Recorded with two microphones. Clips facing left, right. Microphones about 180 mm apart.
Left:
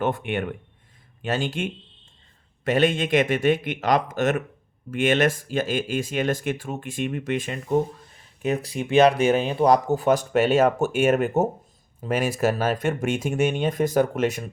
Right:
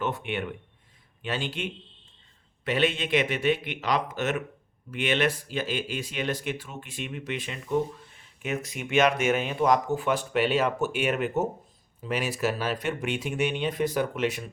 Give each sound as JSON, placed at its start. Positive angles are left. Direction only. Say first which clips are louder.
{"t": 0.0, "sound": "speech", "louder": "left 5 dB", "side_deg": 50}